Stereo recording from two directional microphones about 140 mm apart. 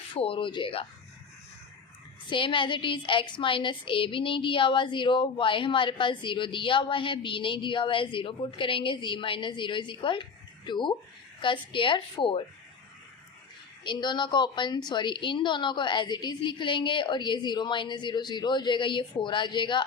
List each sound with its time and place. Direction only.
0.1 s a woman's voice: 40° left (ahead or behind)
2.3 s a woman's voice: 35° left (ahead or behind)
13.8 s a woman's voice: 35° left (ahead or behind)